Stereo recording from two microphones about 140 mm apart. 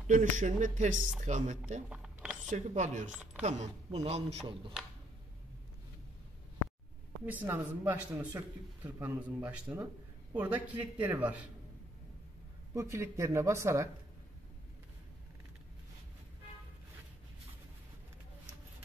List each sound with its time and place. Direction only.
0.1 s speech: 65° right (ahead or behind)
1.9 s a sound: 5° right (ahead or behind)
2.5 s speech: 60° right (ahead or behind)
7.2 s a man's voice: 15° right (ahead or behind)
12.7 s speech: 20° right (ahead or behind)